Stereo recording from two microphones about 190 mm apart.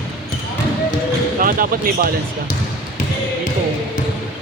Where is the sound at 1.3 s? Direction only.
50° right (ahead or behind).